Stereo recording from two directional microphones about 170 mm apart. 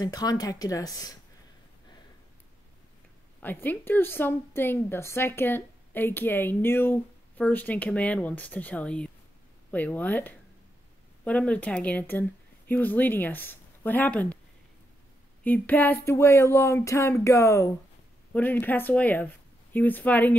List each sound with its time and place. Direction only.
0.0 s speech: 20° left (ahead or behind)
3.4 s a woman's voice: 10° left (ahead or behind)
15.4 s a woman's voice: 10° left (ahead or behind)